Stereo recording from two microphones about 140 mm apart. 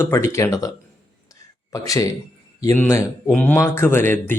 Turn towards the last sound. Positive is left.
turn(degrees=15)  # may be behind; listen again after turning